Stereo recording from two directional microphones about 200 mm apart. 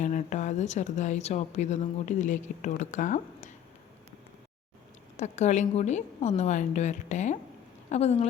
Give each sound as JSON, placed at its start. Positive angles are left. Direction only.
{"t": 0.0, "sound": "speech", "side_deg": 35}
{"t": 5.1, "sound": "speech", "side_deg": 35}